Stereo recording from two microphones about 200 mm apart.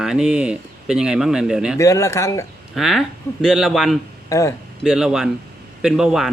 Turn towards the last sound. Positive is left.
turn(degrees=0)  # may be behind; listen again after turning